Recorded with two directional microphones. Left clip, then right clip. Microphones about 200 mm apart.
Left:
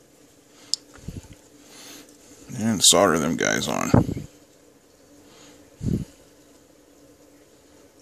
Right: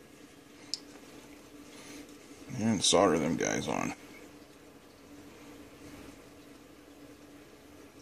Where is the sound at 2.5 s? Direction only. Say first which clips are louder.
Left 8 dB; 30° left (ahead or behind).